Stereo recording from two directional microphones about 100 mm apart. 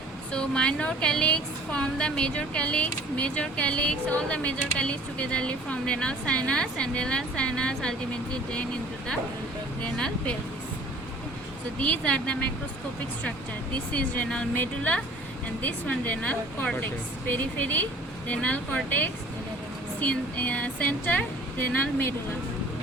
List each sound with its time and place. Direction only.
0.3 s a woman's voice: 10° left (ahead or behind)
11.8 s a woman's voice: 15° left (ahead or behind)
13.9 s a woman's voice: 10° left (ahead or behind)